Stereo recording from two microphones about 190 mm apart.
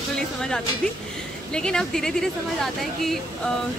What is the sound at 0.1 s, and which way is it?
Music, 5° left (ahead or behind).